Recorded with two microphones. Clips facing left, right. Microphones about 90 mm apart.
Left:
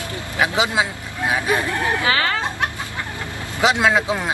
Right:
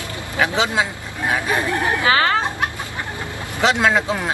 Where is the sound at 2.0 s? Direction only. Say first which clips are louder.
Right 5 dB; 35° right (ahead or behind).